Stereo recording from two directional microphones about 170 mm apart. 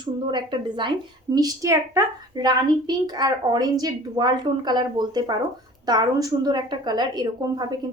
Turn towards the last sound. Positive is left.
turn(degrees=-25)  # may be behind; listen again after turning